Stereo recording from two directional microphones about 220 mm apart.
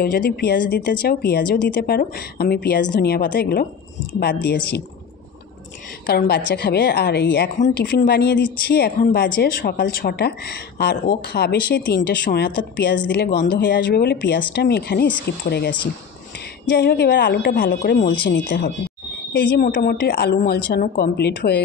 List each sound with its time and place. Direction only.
0.0 s a woman's voice: 45° left (ahead or behind)
6.0 s a woman's voice: 45° left (ahead or behind)
7.5 s a woman's voice: 40° left (ahead or behind)